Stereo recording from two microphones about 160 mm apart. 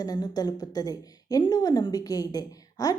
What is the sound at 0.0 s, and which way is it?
A woman's voice, 25° left (ahead or behind).